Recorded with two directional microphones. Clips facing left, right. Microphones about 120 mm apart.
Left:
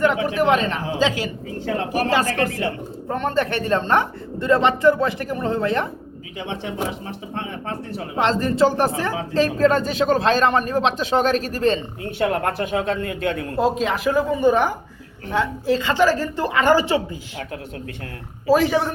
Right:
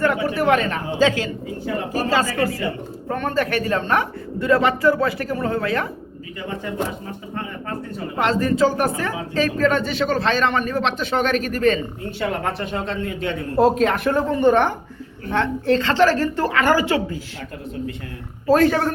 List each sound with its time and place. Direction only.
0.0 s speech: 20° left (ahead or behind)
1.9 s a woman's voice: 15° left (ahead or behind)
6.4 s speech: 80° left
8.2 s a man's voice: 30° left (ahead or behind)
12.3 s speech: 50° left (ahead or behind)
13.6 s a woman's voice: centre (ahead or behind); by 17.4 s 20° left (ahead or behind)
18.4 s a woman's voice: 10° left (ahead or behind)